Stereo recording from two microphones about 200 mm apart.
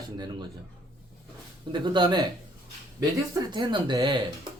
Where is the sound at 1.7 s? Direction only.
25° right (ahead or behind).